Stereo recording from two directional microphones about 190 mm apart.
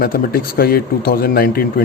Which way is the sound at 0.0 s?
50° left (ahead or behind).